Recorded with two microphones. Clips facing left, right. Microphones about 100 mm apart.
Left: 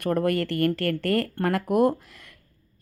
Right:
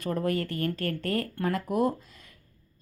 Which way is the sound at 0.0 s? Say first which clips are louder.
Left 5 dB; 65° left (ahead or behind).